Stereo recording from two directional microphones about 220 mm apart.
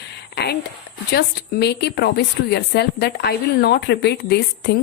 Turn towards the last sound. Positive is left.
turn(degrees=50)  # may be behind; listen again after turning